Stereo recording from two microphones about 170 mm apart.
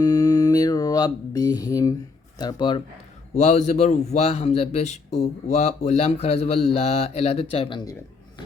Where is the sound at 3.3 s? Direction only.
40° left (ahead or behind).